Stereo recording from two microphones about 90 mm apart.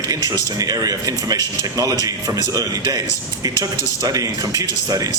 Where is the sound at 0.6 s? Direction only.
45° right (ahead or behind).